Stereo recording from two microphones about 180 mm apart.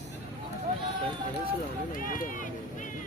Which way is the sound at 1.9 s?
50° left (ahead or behind).